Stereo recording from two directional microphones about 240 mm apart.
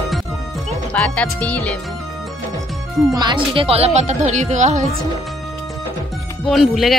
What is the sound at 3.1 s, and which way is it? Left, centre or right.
Speech, centre.